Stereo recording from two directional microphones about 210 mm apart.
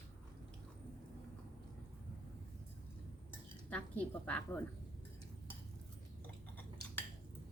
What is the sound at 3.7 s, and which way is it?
Speech, 5° left (ahead or behind).